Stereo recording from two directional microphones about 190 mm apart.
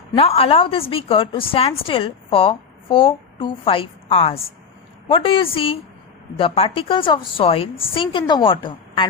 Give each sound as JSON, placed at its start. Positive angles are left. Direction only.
{"t": 0.2, "sound": "a woman's voice", "side_deg": 30}